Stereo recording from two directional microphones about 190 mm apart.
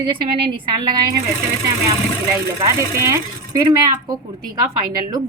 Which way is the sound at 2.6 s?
15° right (ahead or behind).